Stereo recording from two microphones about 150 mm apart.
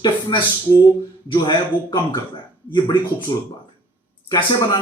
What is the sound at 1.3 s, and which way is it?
Speech, 30° left (ahead or behind).